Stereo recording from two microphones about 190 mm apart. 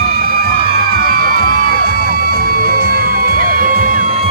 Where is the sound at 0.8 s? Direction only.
50° right (ahead or behind).